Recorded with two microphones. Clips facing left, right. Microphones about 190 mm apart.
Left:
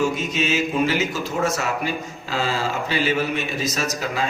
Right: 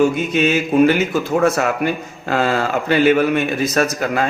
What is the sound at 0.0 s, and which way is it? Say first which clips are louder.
A man's voice: right 7 dB; 60° right (ahead or behind).